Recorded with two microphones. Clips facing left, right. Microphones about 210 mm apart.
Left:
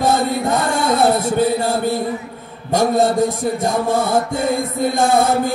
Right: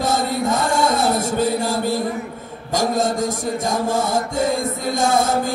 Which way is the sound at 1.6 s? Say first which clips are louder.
Left 2 dB; 55° left (ahead or behind).